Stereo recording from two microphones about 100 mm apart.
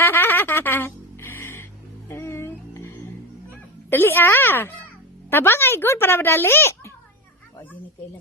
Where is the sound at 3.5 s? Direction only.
20° left (ahead or behind).